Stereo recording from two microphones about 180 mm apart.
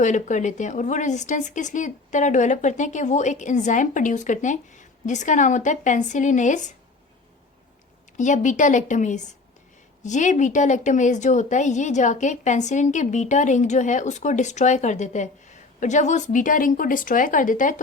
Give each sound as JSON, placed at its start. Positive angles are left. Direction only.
{"t": 0.0, "sound": "speech", "side_deg": 45}
{"t": 8.2, "sound": "speech", "side_deg": 45}